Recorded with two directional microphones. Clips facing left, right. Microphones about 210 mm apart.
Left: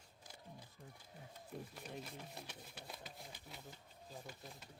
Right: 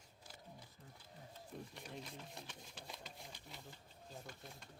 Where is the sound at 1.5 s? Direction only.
5° left (ahead or behind).